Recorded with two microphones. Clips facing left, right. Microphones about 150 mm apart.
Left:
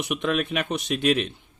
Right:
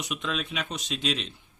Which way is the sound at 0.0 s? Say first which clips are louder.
Left 7 dB; 55° left (ahead or behind).